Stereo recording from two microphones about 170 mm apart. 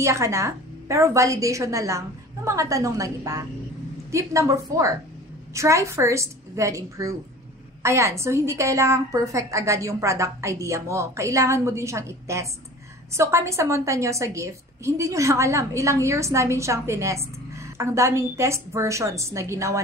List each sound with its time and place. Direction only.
0.0 s a woman's voice: 15° right (ahead or behind)